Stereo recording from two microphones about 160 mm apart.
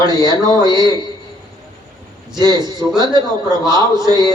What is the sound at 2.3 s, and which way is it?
A man's voice, 25° right (ahead or behind).